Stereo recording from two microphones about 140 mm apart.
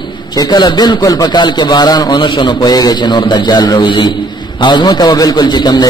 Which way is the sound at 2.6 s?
25° left (ahead or behind).